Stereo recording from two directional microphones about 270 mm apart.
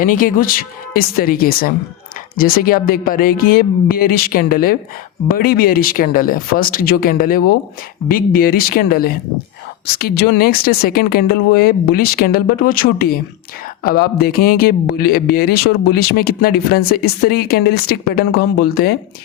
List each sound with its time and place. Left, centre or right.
0.0 s speech: left